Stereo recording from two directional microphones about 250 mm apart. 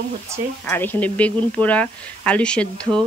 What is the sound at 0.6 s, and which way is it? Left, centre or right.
Speech, centre.